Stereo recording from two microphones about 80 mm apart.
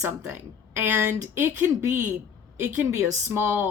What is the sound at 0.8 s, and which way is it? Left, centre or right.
A woman's voice, right.